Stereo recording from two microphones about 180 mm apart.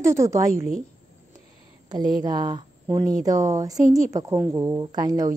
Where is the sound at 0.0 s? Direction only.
15° right (ahead or behind).